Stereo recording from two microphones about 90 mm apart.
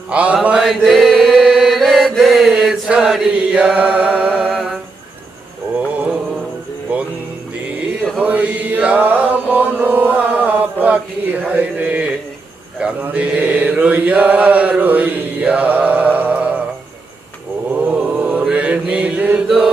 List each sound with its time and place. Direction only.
0.1 s mantra: 15° right (ahead or behind)
0.6 s chant: centre (ahead or behind)
2.9 s mantra: 5° right (ahead or behind)
4.5 s humming: centre (ahead or behind)
5.7 s mantra: 15° right (ahead or behind)
8.2 s chant: 15° right (ahead or behind)
12.8 s mantra: 15° right (ahead or behind)
17.7 s mantra: 15° right (ahead or behind)
19.5 s chant: 5° right (ahead or behind)